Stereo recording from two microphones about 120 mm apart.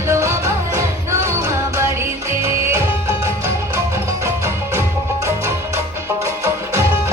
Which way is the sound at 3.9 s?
25° right (ahead or behind).